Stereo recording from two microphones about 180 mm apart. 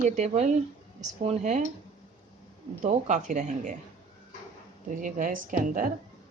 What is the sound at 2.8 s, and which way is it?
Speech, 45° right (ahead or behind).